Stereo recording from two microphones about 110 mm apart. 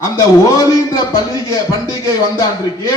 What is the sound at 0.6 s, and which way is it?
Speech, 30° left (ahead or behind).